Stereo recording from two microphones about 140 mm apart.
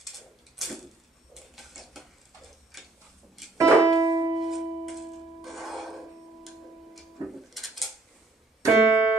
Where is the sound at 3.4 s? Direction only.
Centre (ahead or behind).